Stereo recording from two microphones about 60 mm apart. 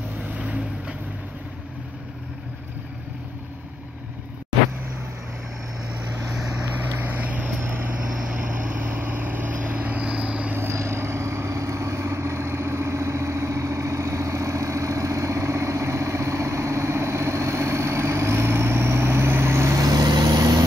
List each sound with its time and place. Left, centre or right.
0.4 s boat: right
6.7 s vehicle: right
7.6 s vehicle: right
8.1 s vehicle: centre
8.4 s vehicle: right
10.5 s vehicle: right
19.8 s vehicle: right